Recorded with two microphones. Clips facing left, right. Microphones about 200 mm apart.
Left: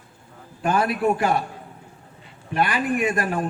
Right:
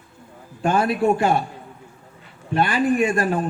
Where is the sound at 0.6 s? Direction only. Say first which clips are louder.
Right 2 dB; 25° right (ahead or behind).